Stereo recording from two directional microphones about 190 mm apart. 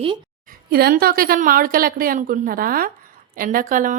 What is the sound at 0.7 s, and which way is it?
Speech, 55° right (ahead or behind).